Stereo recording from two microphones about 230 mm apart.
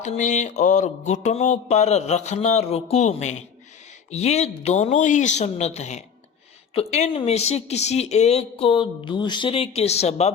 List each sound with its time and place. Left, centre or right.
0.0 s speech: left